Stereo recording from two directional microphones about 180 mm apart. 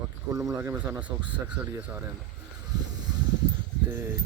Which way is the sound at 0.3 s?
15° right (ahead or behind).